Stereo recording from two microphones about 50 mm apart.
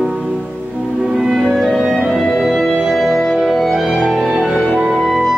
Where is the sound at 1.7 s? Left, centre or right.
Centre.